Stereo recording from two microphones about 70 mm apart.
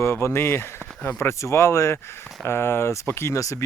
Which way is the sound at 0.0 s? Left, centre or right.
Left.